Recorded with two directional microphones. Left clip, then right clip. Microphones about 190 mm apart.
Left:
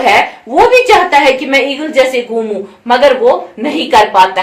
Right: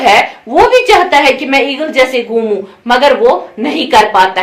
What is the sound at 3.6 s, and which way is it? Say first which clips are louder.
Speech: right 1 dB; 30° right (ahead or behind).